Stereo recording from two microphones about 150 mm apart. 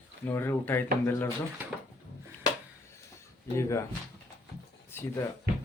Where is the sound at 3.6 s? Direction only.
20° left (ahead or behind).